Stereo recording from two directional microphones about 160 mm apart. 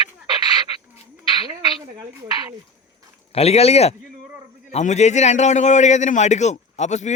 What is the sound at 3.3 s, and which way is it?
A man's voice, 40° left (ahead or behind).